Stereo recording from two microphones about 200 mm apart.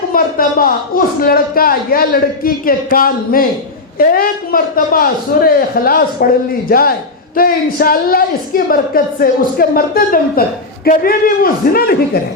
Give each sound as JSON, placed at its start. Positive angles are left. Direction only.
{"t": 0.1, "sound": "a man's voice", "side_deg": 45}